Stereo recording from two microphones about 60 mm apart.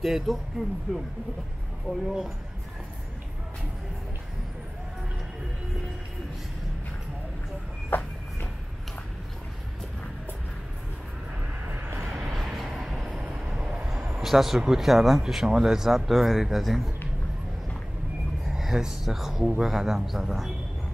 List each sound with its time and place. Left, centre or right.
0.0 s speech: centre
1.9 s speech: centre
7.9 s a sound: left
11.7 s vehicle: right
12.3 s vehicle: centre
13.4 s train: centre
13.9 s a sound: centre
14.2 s speech: centre
18.5 s speech: centre